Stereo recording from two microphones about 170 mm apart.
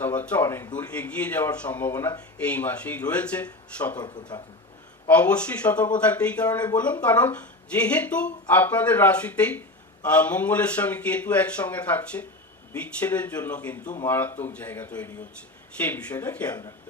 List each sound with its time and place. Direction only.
0.0 s speech: 10° left (ahead or behind)
4.0 s speech: 25° left (ahead or behind)
5.0 s speech: 10° left (ahead or behind)